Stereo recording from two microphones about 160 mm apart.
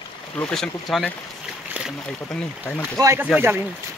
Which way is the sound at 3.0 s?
20° right (ahead or behind).